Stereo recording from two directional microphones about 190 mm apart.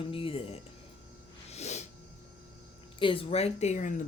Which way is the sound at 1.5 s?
35° left (ahead or behind).